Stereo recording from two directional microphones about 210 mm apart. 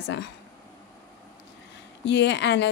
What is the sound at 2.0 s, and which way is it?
Speech, 55° left (ahead or behind).